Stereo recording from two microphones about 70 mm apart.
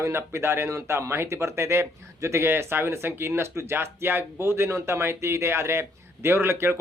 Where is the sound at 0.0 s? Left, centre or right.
Right.